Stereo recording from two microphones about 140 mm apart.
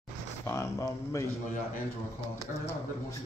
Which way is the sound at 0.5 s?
20° left (ahead or behind).